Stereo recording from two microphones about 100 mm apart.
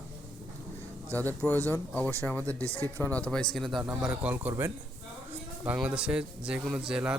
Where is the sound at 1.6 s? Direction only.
20° left (ahead or behind).